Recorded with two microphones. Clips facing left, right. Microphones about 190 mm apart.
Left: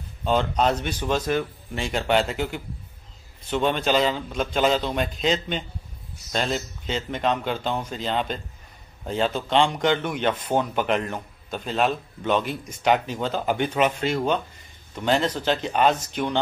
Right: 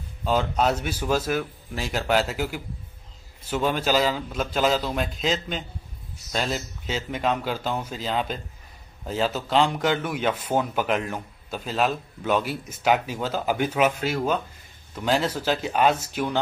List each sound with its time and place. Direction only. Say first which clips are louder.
0.2 s speech: left 1 dB; 5° right (ahead or behind)